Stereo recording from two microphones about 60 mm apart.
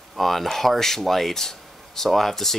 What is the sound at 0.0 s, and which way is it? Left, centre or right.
Speech, centre.